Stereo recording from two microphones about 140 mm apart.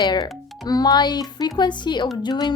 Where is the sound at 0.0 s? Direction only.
25° left (ahead or behind).